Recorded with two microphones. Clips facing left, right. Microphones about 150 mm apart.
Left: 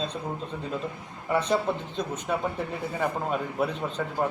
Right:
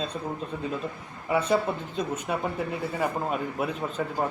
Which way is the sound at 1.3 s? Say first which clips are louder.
Right 1 dB; 5° right (ahead or behind).